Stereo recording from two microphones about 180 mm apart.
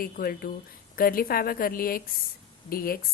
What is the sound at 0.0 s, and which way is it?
A woman's voice, 55° left (ahead or behind).